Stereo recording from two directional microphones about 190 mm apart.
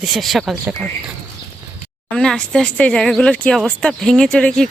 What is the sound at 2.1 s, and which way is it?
Speech, 5° left (ahead or behind).